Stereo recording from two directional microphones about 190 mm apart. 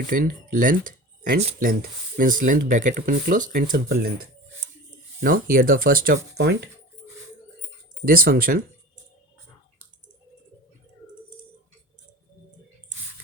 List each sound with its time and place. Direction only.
0.1 s speech: 45° right (ahead or behind)
5.2 s speech: 45° right (ahead or behind)
8.0 s speech: 50° right (ahead or behind)